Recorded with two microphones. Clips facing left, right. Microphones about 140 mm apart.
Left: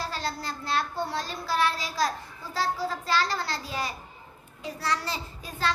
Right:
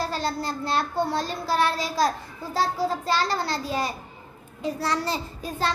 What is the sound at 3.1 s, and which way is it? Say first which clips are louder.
Speech: right 3 dB; 25° right (ahead or behind).